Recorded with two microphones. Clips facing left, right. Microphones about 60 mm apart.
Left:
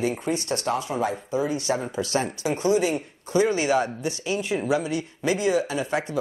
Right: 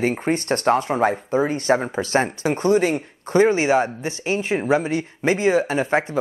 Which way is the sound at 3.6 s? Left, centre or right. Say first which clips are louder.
Right 4 dB; right.